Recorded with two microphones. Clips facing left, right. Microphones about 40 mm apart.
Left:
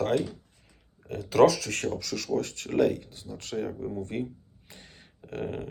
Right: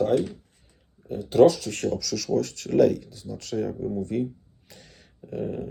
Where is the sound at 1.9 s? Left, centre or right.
Left.